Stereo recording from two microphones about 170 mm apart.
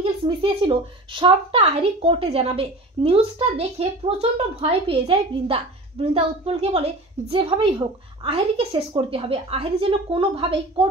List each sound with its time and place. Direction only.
0.0 s a woman's voice: 30° right (ahead or behind)